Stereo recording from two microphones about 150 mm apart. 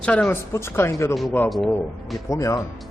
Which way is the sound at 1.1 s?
Centre (ahead or behind).